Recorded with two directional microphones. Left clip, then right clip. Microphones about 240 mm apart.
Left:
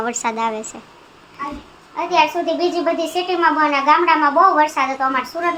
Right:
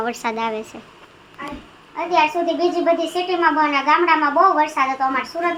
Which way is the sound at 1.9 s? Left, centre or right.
Centre.